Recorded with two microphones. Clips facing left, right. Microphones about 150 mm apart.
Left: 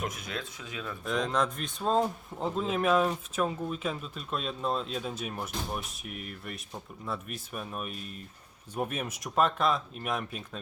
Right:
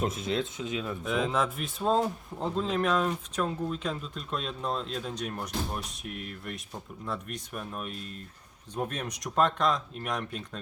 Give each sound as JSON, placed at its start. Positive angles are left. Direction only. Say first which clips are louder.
{"t": 0.0, "sound": "speech", "louder": "right 7 dB", "side_deg": -25}
{"t": 1.0, "sound": "speech", "louder": "even", "side_deg": -5}